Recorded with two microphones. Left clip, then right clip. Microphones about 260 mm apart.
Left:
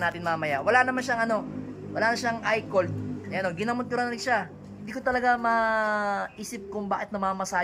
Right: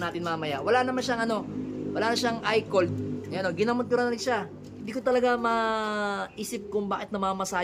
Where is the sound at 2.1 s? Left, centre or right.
Centre.